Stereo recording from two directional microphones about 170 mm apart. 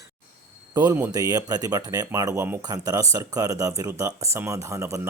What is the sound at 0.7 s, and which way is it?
A man's voice, 25° right (ahead or behind).